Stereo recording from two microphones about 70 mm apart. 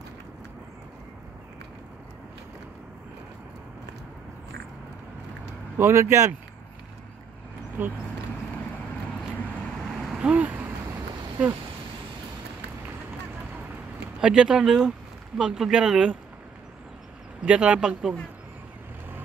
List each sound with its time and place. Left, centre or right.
5.8 s speech: right
7.8 s speech: right
10.1 s vehicle: centre
14.2 s speech: centre
17.5 s speech: centre